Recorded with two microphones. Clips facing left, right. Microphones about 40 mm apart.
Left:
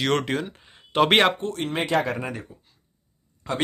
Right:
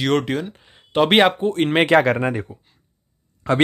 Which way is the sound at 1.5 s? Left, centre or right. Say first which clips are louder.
Right 8 dB; right.